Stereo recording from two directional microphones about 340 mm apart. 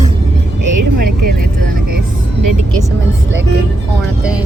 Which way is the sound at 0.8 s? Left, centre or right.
Right.